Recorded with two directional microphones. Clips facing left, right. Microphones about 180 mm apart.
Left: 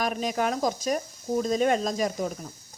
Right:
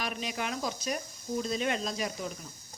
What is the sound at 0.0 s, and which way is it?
Speech, 45° left (ahead or behind).